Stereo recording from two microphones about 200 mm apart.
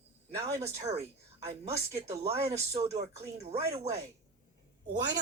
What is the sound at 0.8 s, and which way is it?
Speech, 30° right (ahead or behind).